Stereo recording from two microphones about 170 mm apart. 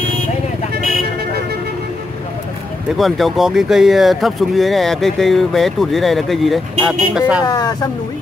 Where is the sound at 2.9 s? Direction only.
Centre (ahead or behind).